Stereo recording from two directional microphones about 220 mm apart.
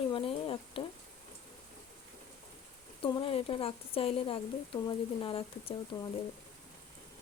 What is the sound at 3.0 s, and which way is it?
Speech, 20° left (ahead or behind).